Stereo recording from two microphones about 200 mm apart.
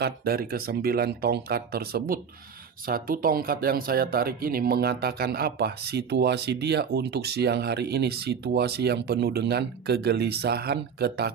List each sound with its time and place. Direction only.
0.0 s speech: 50° right (ahead or behind)